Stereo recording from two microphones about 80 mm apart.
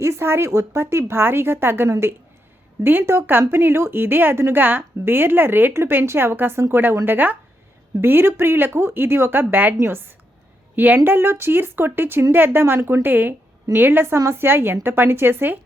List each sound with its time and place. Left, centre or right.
0.0 s a woman's voice: right